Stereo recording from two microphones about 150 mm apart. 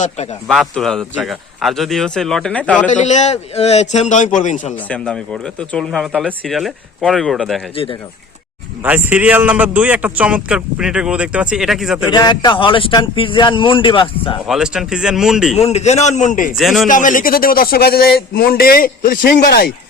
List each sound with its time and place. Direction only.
0.4 s speech: centre (ahead or behind)
2.8 s a man's voice: 55° left (ahead or behind)
4.1 s a man's voice: 55° left (ahead or behind)
4.9 s speech: 5° left (ahead or behind)
8.8 s a man's voice: 10° right (ahead or behind)
12.1 s speech: 30° left (ahead or behind)
14.4 s speech: 5° right (ahead or behind)
15.5 s a man's voice: 45° left (ahead or behind)
16.6 s speech: centre (ahead or behind)
16.9 s speech: 60° left (ahead or behind); by 19.7 s 90° left